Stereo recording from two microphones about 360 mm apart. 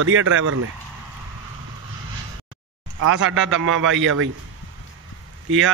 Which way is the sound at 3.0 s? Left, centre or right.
Right.